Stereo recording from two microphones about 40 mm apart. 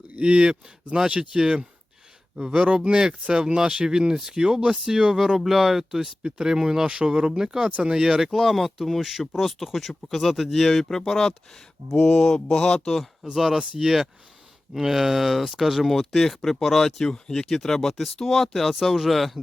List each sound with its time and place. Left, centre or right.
0.1 s speech: right
5.4 s speech: centre
6.2 s speech: centre
8.3 s speech: centre
11.9 s mantra: left
12.3 s speech: left
13.3 s speech: centre